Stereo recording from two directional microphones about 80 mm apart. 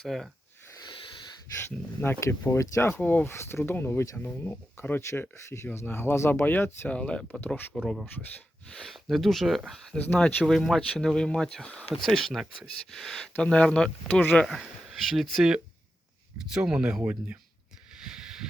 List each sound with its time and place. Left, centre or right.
0.0 s speech: centre
0.9 s a sound: left
2.2 s speech: left
3.0 s speech: left
7.4 s speech: left
8.7 s speech: centre
10.0 s speech: centre
10.4 s speech: centre
18.0 s a sound: centre